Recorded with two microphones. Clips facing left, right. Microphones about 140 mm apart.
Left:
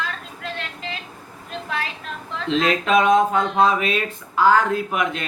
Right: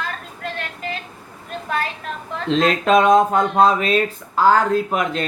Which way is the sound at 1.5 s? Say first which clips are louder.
Right 4 dB; 45° right (ahead or behind).